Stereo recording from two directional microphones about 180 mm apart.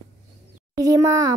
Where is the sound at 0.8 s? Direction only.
20° right (ahead or behind).